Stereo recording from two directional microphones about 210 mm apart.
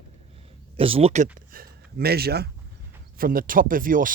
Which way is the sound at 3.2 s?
40° right (ahead or behind).